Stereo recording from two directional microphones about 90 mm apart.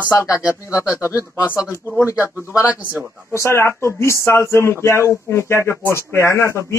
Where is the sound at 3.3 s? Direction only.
30° left (ahead or behind).